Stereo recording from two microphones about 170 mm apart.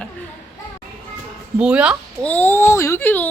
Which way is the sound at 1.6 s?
5° right (ahead or behind).